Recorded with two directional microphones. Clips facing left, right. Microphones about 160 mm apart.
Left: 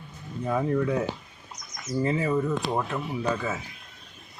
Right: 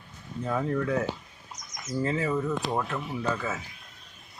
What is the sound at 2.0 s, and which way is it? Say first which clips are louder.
Speech: left 2 dB; 15° left (ahead or behind).